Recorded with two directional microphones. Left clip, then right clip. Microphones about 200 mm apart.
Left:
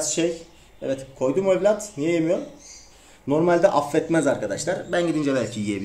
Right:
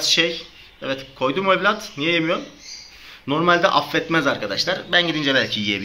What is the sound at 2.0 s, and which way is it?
Speech, 5° left (ahead or behind).